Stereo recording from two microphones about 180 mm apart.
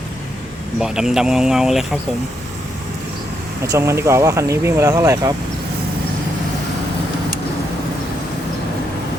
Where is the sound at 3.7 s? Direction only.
15° right (ahead or behind).